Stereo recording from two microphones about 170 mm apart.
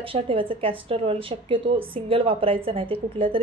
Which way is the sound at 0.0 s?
30° right (ahead or behind).